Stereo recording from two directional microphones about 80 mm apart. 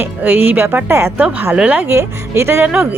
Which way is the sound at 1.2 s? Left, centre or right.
Right.